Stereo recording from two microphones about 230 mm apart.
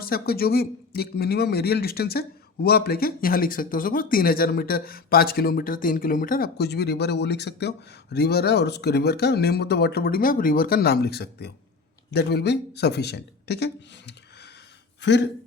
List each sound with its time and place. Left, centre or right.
0.0 s a man's voice: left
15.0 s a man's voice: left